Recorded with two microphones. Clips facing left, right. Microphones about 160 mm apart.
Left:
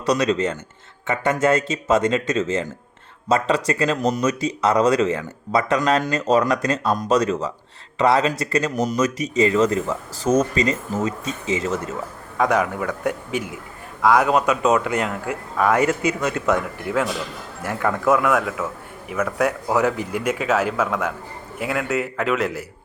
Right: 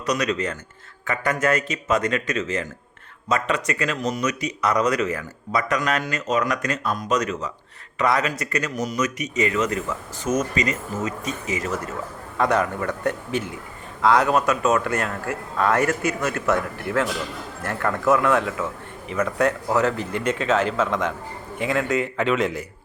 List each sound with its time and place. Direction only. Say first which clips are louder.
0.0 s speech: left 4 dB; 30° left (ahead or behind)
12.4 s a man's voice: left 1 dB; 10° left (ahead or behind)